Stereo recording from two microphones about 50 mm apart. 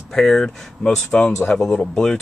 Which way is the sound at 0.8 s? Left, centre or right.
Centre.